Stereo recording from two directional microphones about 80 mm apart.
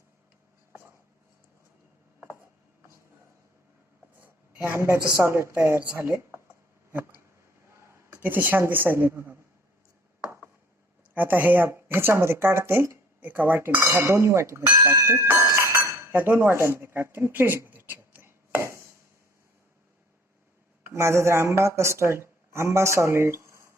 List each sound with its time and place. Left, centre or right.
4.2 s a sound: right
4.8 s a woman's voice: right
6.0 s speech: right
8.1 s speech: right
11.1 s speech: right
17.4 s chopping: right
20.8 s a woman's voice: right